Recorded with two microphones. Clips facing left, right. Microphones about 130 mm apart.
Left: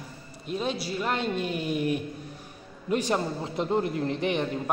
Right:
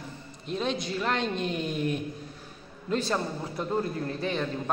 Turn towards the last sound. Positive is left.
turn(degrees=20)  # may be behind; listen again after turning